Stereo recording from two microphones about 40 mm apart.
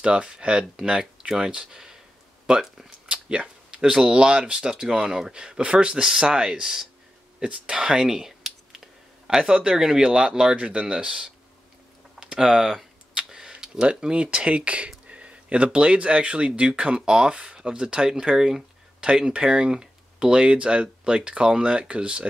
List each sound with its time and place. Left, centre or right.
0.0 s speech: right
1.7 s speech: centre
3.1 s speech: right
7.4 s speech: right
12.2 s tick-tock: centre; by 14.9 s right
15.0 s speech: right